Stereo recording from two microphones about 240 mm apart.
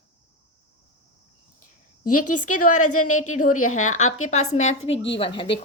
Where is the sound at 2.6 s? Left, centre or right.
Left.